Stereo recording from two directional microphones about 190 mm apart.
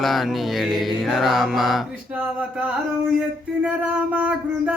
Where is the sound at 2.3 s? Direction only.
10° right (ahead or behind).